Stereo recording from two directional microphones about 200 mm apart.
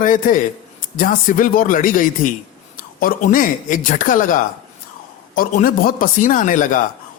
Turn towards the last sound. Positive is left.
turn(degrees=40)  # may be behind; listen again after turning